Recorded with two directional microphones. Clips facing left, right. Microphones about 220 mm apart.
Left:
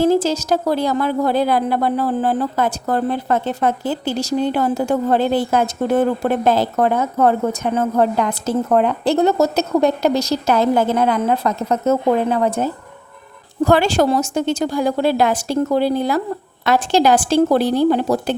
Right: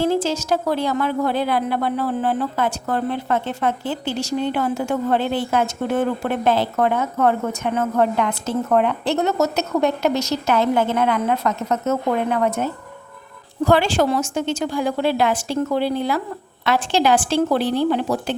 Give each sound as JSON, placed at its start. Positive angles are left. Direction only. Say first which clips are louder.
{"t": 0.0, "sound": "speech", "louder": "left 4 dB", "side_deg": 40}